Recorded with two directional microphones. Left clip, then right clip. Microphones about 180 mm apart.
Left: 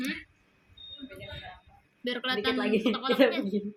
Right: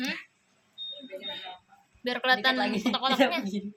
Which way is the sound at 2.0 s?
70° right (ahead or behind).